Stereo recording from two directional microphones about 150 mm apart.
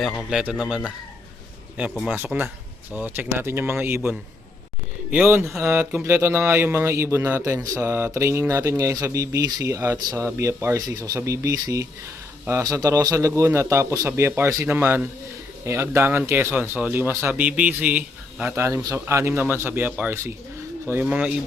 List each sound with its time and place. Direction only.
0.0 s speech: centre (ahead or behind)
1.9 s speech: 5° left (ahead or behind)
2.1 s a man's voice: 10° right (ahead or behind)